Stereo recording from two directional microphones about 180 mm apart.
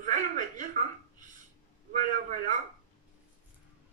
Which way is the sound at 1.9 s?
45° right (ahead or behind).